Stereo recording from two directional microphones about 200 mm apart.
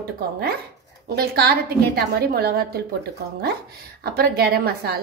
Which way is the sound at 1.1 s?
50° right (ahead or behind).